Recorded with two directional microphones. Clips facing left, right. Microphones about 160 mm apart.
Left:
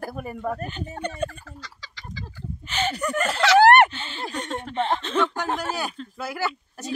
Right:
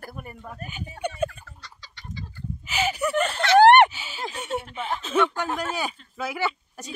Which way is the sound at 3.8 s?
10° right (ahead or behind).